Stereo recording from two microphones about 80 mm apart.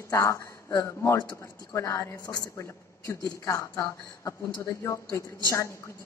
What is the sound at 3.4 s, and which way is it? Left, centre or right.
A woman's voice, left.